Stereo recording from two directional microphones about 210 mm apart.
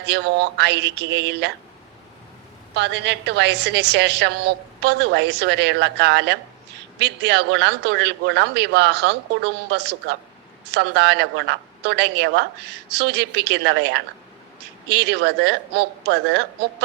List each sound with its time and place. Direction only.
0.0 s a woman's voice: 55° right (ahead or behind)
2.7 s a woman's voice: 55° right (ahead or behind)